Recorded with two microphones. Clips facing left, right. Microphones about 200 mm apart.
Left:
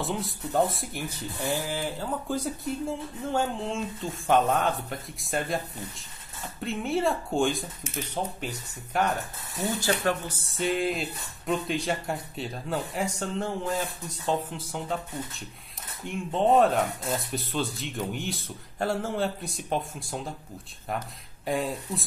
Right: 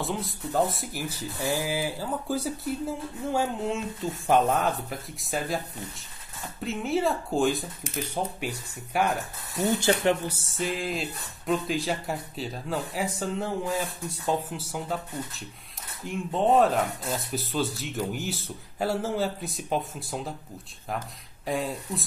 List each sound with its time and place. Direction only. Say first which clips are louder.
0.0 s speech: even; centre (ahead or behind)
9.8 s speech: right 3 dB; 20° right (ahead or behind)
10.5 s speech: left 4 dB; centre (ahead or behind)
16.0 s speech: even; centre (ahead or behind)
21.5 s speech: left 1 dB; centre (ahead or behind)